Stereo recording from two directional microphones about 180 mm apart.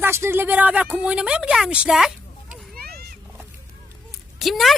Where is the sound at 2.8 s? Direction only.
60° right (ahead or behind).